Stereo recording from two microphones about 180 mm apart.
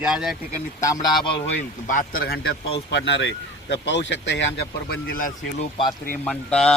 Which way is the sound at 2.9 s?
85° left.